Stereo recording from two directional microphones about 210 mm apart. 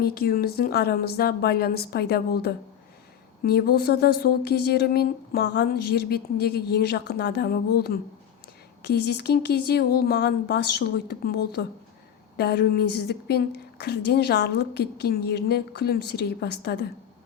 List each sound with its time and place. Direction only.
0.0 s a woman's voice: 45° left (ahead or behind)